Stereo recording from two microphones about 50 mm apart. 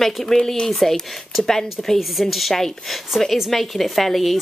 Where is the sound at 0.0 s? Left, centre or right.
Centre.